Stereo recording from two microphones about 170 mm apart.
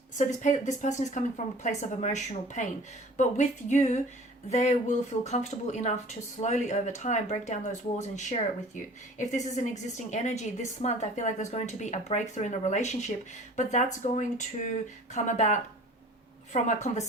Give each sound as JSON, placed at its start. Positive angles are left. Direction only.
{"t": 0.2, "sound": "a woman's voice", "side_deg": 45}